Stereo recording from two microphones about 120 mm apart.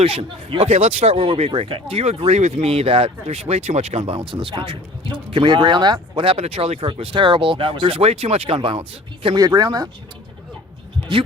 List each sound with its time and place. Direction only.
0.0 s speech: 50° right (ahead or behind)
4.3 s speech: 45° right (ahead or behind)
9.4 s speech: 35° right (ahead or behind)